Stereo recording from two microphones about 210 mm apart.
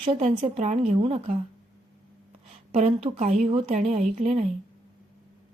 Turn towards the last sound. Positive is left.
turn(degrees=-30)  # may be behind; listen again after turning